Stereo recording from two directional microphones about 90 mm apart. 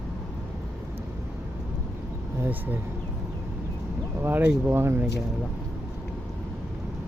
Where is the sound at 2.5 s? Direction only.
20° right (ahead or behind).